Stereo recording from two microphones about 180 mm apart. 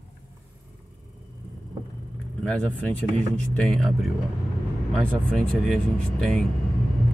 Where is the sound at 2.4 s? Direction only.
5° left (ahead or behind).